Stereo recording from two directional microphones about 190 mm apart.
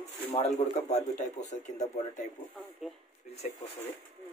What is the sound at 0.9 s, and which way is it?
Speech, 35° left (ahead or behind).